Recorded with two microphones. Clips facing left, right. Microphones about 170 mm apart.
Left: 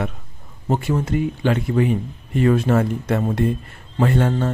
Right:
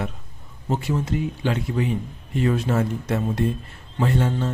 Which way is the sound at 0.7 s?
55° left (ahead or behind).